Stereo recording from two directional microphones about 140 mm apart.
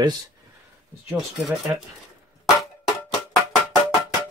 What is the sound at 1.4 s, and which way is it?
Speech, centre (ahead or behind).